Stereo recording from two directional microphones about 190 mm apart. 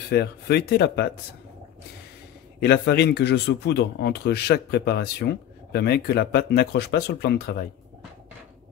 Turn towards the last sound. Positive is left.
turn(degrees=55)  # may be behind; listen again after turning